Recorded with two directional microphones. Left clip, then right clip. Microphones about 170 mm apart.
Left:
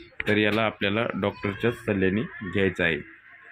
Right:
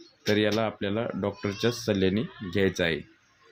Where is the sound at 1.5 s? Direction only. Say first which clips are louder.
Left 1 dB; 20° right (ahead or behind).